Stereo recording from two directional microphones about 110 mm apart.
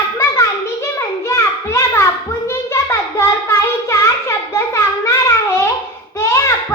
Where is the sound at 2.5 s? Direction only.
25° left (ahead or behind).